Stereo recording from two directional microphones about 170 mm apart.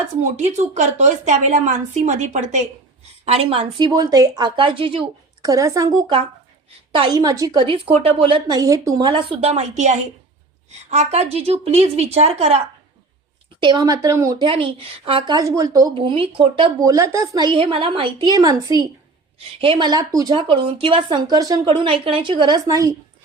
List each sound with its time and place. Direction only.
0.3 s a woman's voice: 40° right (ahead or behind)
5.5 s a woman's voice: 20° right (ahead or behind); by 12.6 s 40° right (ahead or behind)
13.6 s speech: 25° right (ahead or behind)
16.8 s speech: 20° right (ahead or behind)